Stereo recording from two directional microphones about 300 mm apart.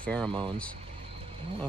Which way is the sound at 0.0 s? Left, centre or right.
Centre.